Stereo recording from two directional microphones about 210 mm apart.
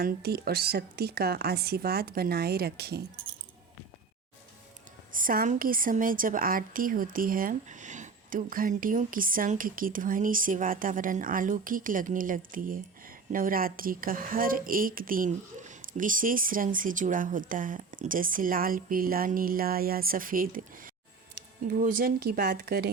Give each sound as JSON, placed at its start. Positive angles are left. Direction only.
{"t": 0.0, "sound": "speech", "side_deg": -50}
{"t": 5.1, "sound": "a woman's voice", "side_deg": -40}